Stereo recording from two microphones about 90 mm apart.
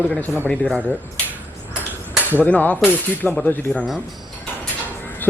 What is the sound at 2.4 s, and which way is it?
A man's voice, 15° left (ahead or behind).